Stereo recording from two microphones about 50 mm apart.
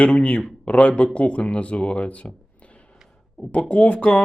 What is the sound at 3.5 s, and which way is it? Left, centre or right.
Speech, left.